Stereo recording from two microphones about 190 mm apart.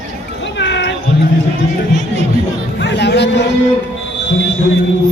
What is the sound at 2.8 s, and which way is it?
Speech, 65° left (ahead or behind).